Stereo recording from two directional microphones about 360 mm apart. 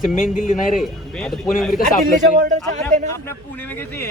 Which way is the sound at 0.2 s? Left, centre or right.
Left.